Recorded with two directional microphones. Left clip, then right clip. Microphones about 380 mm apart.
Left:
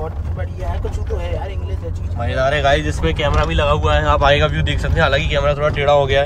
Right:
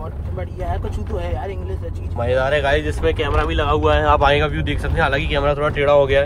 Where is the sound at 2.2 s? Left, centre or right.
Centre.